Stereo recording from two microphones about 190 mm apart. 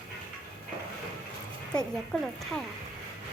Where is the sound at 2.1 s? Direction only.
5° left (ahead or behind).